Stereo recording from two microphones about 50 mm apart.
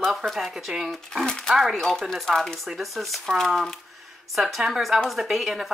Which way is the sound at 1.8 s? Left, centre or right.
Centre.